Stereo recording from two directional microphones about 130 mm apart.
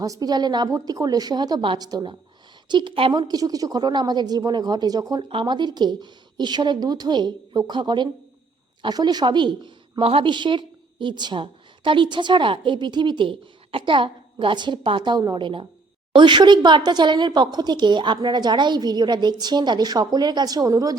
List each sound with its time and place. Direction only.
0.0 s a woman's voice: 30° right (ahead or behind)